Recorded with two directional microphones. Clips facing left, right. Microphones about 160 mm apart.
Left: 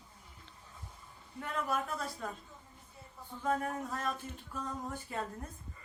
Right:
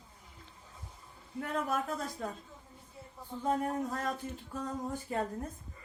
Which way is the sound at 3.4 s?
30° right (ahead or behind).